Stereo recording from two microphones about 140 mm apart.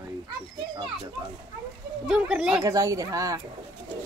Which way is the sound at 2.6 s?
25° right (ahead or behind).